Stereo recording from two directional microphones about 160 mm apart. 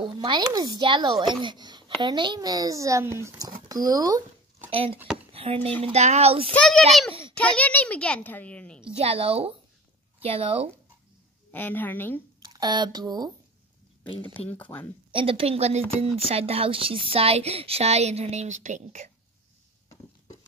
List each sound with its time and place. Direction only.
0.0 s a child's voice: 30° right (ahead or behind)
4.6 s speech: 35° right (ahead or behind)
6.5 s a child's voice: 5° left (ahead or behind)
7.1 s a sound: 35° right (ahead or behind)
7.3 s a child's voice: 5° left (ahead or behind)
8.9 s speech: 35° right (ahead or behind)
11.5 s a child's voice: 10° left (ahead or behind)
12.4 s speech: 25° right (ahead or behind)
14.2 s a child's voice: 10° left (ahead or behind)
15.0 s speech: 35° right (ahead or behind)